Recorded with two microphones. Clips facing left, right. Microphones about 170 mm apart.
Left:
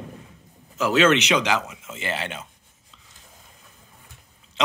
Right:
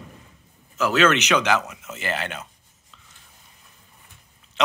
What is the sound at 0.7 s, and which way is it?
Speech, 30° left (ahead or behind).